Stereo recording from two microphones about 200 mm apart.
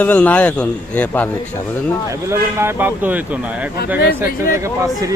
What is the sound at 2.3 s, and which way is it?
Speech, 10° right (ahead or behind).